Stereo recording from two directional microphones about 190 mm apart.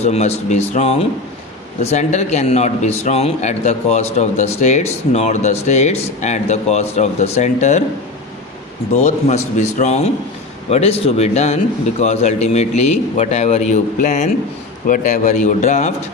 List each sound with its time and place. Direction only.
0.0 s a man's voice: 35° left (ahead or behind)
9.0 s a man's voice: 40° left (ahead or behind)